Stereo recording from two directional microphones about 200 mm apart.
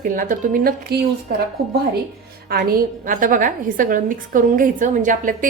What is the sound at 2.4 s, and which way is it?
A woman's voice, 50° right (ahead or behind).